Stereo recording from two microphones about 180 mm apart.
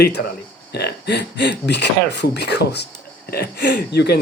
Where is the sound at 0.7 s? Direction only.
65° left (ahead or behind).